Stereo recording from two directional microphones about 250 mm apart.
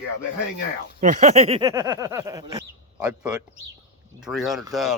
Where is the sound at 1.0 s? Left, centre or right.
Right.